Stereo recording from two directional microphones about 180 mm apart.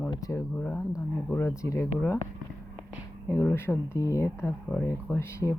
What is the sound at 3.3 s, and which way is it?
Speech, 10° left (ahead or behind).